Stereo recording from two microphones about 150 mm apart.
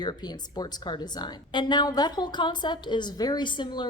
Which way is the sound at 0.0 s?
30° left (ahead or behind).